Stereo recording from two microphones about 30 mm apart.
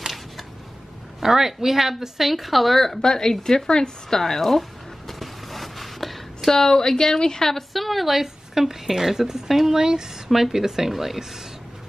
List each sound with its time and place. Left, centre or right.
0.0 s a sound: centre
1.2 s a woman's voice: centre
3.0 s a woman's voice: centre
4.2 s a sound: centre
6.5 s a woman's voice: centre
7.7 s a woman's voice: centre
9.8 s a woman's voice: centre